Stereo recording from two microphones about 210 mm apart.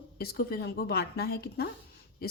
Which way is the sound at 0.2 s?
50° left (ahead or behind).